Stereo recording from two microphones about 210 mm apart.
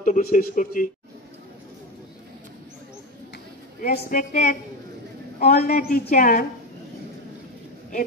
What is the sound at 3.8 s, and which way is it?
A man's voice, 40° left (ahead or behind).